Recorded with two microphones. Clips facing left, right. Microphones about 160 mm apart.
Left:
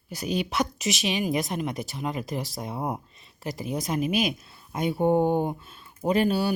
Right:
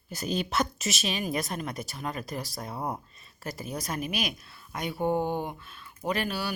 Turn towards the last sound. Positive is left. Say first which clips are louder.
# left 7 dB
turn(degrees=25)  # may be behind; listen again after turning